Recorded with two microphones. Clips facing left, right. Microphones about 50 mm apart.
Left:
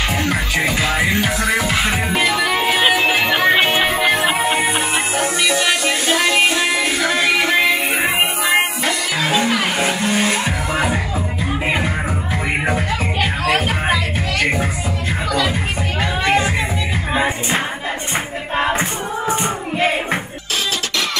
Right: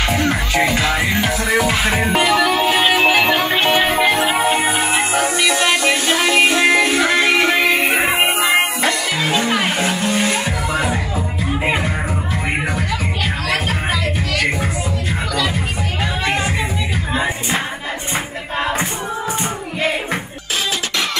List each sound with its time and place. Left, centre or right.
0.3 s music: centre
2.4 s music: centre
6.5 s music: right
6.8 s music: centre
12.6 s music: centre
16.0 s music: centre
18.6 s a sound: centre